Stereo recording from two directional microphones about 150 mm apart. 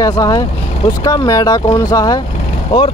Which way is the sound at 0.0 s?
25° left (ahead or behind).